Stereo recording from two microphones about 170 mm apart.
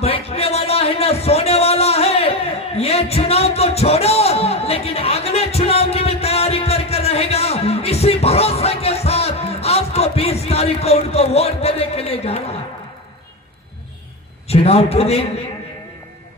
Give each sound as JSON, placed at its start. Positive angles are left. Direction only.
{"t": 0.0, "sound": "music", "side_deg": 35}
{"t": 14.5, "sound": "a man's voice", "side_deg": 35}